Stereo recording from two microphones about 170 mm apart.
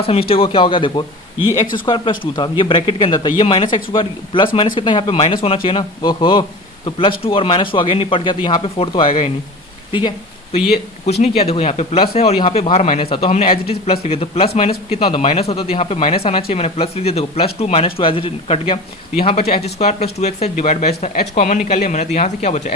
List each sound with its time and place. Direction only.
0.0 s speech: 35° left (ahead or behind)
11.2 s speech: 35° left (ahead or behind)